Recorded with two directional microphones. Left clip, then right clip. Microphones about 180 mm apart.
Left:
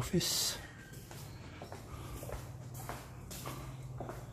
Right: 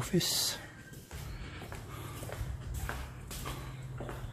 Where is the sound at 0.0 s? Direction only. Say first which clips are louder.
Right 3 dB; 15° right (ahead or behind).